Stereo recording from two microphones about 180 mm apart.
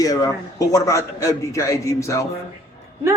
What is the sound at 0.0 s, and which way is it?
A man's voice, 20° left (ahead or behind).